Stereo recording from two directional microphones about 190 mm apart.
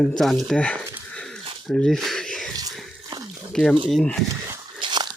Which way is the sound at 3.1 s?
25° right (ahead or behind).